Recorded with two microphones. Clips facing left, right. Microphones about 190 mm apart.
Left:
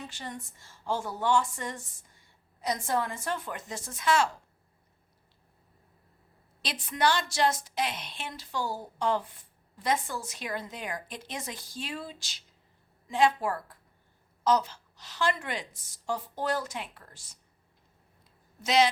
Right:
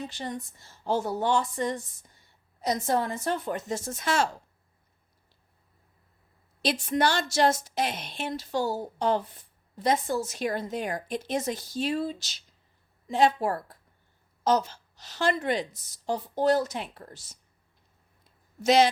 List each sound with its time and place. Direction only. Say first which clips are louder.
0.0 s a woman's voice: right 6 dB; 35° right (ahead or behind)
6.7 s a woman's voice: right 3 dB; 45° right (ahead or behind)
18.6 s a woman's voice: right 4 dB; 50° right (ahead or behind)